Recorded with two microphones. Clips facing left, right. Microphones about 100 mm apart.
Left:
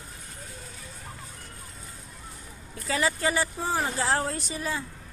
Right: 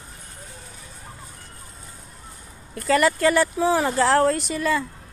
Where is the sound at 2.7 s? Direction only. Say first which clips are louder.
Right 8 dB; 65° right (ahead or behind); by 4.9 s 80° right.